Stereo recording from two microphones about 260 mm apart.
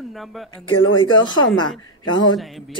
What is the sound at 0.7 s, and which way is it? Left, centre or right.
Speech, left.